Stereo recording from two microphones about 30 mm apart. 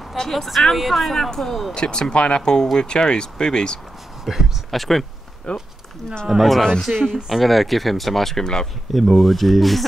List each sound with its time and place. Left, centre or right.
0.1 s speech: centre
1.7 s speech: left
2.4 s speech: left
4.2 s speech: centre
4.6 s speech: centre
5.5 s speech: left
6.2 s speech: centre
6.6 s speech: left
7.2 s speech: centre